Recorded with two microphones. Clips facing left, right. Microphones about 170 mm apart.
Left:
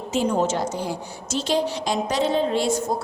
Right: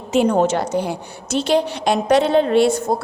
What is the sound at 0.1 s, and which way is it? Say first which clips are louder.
A woman's voice: right 6 dB; 65° right (ahead or behind).